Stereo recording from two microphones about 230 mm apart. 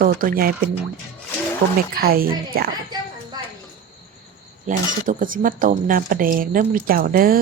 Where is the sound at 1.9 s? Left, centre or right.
Right.